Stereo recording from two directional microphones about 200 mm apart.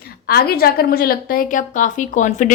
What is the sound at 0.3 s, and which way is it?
A woman's voice, 50° left (ahead or behind).